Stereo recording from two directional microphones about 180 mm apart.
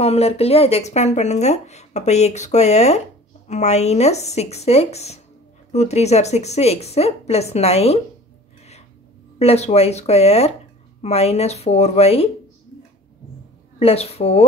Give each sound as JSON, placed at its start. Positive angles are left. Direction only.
{"t": 0.0, "sound": "speech", "side_deg": 35}
{"t": 9.4, "sound": "speech", "side_deg": 35}
{"t": 13.7, "sound": "speech", "side_deg": 35}